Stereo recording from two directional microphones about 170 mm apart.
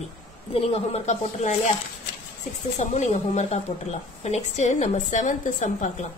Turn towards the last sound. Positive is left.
turn(degrees=50)  # may be behind; listen again after turning